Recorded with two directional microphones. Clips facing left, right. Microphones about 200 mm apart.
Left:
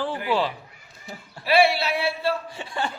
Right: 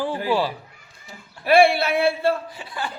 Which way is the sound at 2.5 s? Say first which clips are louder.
Left 2 dB; 25° left (ahead or behind).